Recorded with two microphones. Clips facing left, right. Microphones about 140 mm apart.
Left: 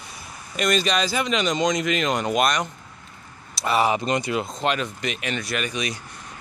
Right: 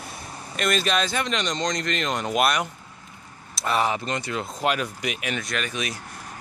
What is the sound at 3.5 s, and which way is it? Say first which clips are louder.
Speech: left 3 dB; 5° left (ahead or behind).